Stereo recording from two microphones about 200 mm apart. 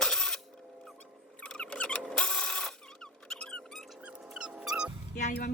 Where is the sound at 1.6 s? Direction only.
5° left (ahead or behind).